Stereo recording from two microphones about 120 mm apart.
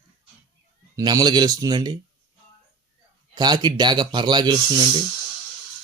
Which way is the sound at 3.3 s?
35° right (ahead or behind).